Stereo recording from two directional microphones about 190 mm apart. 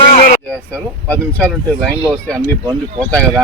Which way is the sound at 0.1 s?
50° left (ahead or behind).